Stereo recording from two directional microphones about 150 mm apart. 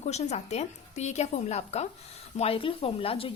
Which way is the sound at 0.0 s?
45° left (ahead or behind).